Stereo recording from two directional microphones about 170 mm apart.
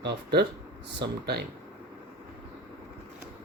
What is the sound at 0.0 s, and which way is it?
Speech, 80° right.